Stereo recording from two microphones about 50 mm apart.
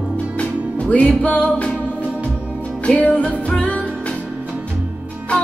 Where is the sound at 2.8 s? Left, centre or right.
Left.